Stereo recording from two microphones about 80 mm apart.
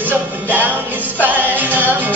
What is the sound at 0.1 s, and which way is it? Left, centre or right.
Music, right.